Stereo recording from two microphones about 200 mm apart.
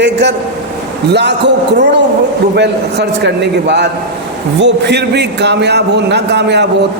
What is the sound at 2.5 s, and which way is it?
A man's voice, 60° right (ahead or behind).